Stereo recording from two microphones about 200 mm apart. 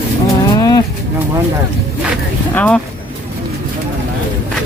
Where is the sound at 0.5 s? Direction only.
20° left (ahead or behind).